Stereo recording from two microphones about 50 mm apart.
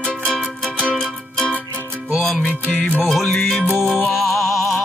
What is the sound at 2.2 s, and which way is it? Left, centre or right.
Music, centre.